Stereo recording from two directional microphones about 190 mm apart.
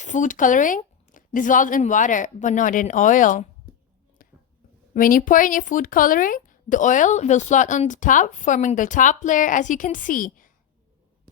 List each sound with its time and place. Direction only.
0.0 s speech: 40° left (ahead or behind)
4.9 s speech: 45° left (ahead or behind)